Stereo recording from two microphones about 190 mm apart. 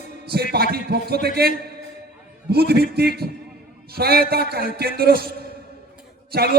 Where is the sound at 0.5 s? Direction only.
55° right (ahead or behind).